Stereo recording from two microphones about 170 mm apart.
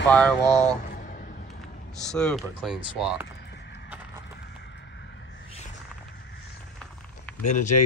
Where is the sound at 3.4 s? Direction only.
90° left.